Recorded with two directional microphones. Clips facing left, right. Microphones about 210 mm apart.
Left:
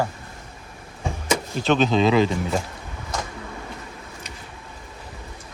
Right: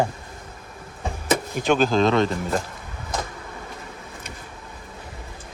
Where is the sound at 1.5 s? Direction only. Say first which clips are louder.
Left 1 dB; 15° right (ahead or behind).